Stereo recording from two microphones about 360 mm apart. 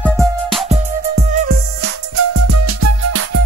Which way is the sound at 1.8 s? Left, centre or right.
Right.